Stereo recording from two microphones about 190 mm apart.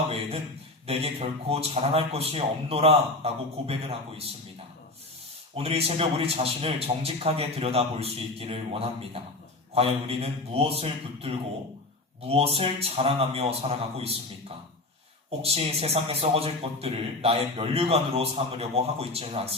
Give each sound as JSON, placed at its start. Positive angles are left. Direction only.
{"t": 0.9, "sound": "a man's voice", "side_deg": -30}
{"t": 5.5, "sound": "a man's voice", "side_deg": -30}
{"t": 15.3, "sound": "a man's voice", "side_deg": -30}